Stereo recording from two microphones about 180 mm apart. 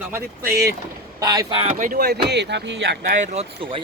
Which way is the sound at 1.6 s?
50° right (ahead or behind).